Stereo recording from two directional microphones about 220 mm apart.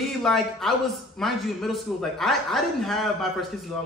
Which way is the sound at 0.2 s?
Centre (ahead or behind).